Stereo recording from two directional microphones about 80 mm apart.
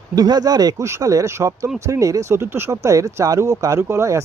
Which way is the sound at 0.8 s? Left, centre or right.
Right.